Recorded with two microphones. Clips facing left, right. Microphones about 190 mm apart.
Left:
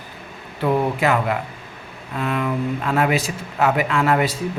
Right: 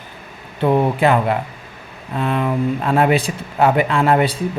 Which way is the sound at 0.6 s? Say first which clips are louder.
Right 4 dB; 30° right (ahead or behind).